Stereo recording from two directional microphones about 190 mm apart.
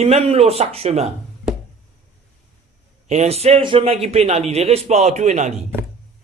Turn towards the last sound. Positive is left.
turn(degrees=-35)  # may be behind; listen again after turning